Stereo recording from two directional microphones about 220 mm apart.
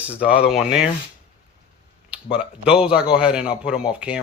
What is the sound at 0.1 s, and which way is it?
Speech, 5° right (ahead or behind).